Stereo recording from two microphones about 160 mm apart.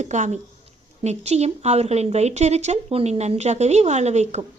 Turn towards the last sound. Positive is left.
turn(degrees=-45)  # may be behind; listen again after turning